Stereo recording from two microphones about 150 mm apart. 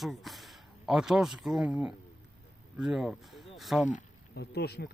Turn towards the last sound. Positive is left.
turn(degrees=90)